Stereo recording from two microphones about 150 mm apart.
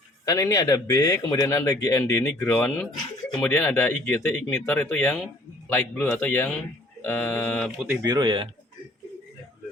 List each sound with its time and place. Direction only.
0.3 s speech: 20° left (ahead or behind); by 7.9 s 5° left (ahead or behind)
8.0 s speech: 25° right (ahead or behind)